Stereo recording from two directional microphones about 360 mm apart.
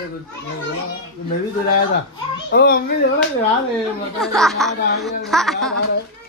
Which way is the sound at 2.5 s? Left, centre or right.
Left.